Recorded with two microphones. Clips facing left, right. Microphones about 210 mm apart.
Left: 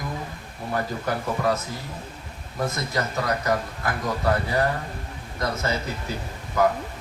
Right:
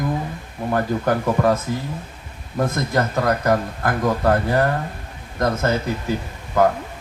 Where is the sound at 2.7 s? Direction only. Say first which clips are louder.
Right 5 dB; 50° right (ahead or behind).